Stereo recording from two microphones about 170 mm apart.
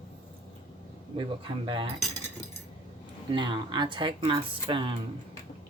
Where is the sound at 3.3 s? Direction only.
25° right (ahead or behind).